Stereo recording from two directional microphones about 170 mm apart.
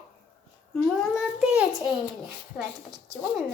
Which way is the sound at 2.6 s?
Centre (ahead or behind).